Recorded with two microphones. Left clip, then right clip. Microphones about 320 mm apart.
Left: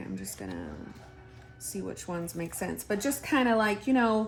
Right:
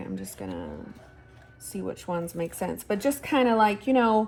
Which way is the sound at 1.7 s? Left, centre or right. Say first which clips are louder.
Right 5 dB; centre.